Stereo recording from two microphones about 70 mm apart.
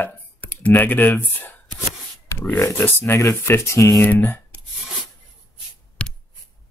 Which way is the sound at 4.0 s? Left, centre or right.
Left.